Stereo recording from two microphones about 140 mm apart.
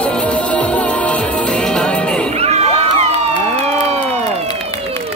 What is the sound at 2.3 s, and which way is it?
Crowd, 50° right (ahead or behind).